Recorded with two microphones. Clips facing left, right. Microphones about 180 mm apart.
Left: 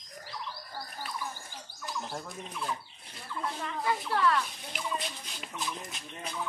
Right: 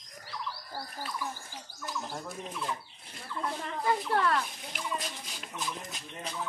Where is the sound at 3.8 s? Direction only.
45° right (ahead or behind).